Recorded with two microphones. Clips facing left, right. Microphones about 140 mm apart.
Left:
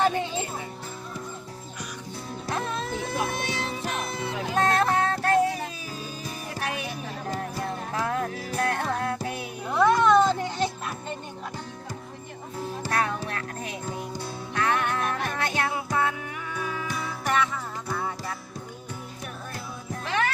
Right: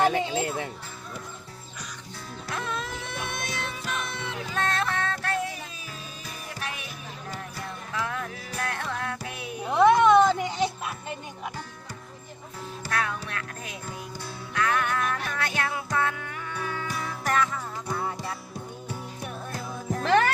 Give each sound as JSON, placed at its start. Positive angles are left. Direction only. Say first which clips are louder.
{"t": 2.5, "sound": "music", "louder": "left 3 dB", "side_deg": 35}
{"t": 7.9, "sound": "music", "louder": "left 3 dB", "side_deg": 40}
{"t": 9.6, "sound": "music", "louder": "right 2 dB", "side_deg": -20}
{"t": 12.9, "sound": "music", "louder": "left 2 dB", "side_deg": 35}
{"t": 20.1, "sound": "music", "louder": "right 6 dB", "side_deg": -45}